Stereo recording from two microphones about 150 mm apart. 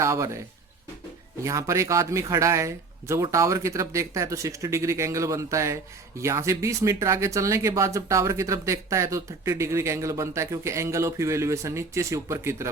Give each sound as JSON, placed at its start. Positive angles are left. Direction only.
{"t": 0.0, "sound": "a man's voice", "side_deg": -20}
{"t": 1.5, "sound": "speech", "side_deg": -20}